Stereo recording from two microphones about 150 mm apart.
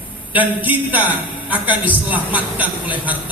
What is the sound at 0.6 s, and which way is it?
A woman's voice, 10° right (ahead or behind).